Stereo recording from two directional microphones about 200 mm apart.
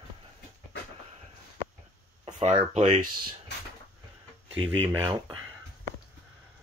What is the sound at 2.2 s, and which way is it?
Speech, 30° right (ahead or behind).